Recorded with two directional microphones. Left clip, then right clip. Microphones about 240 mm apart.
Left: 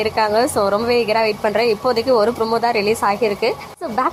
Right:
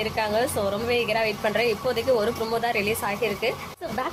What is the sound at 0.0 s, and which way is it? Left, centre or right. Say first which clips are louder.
A woman's voice: left 8 dB; left.